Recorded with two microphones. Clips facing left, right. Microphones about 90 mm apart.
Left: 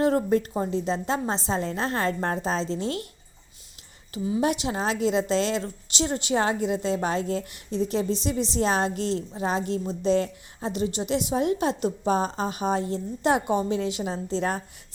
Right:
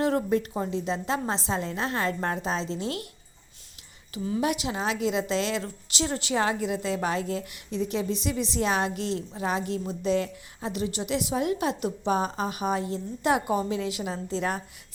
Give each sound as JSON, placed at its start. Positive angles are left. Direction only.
{"t": 0.0, "sound": "a woman's voice", "side_deg": 35}
{"t": 4.4, "sound": "a woman's voice", "side_deg": 30}